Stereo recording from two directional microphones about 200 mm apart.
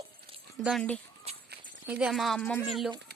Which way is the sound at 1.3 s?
30° right (ahead or behind).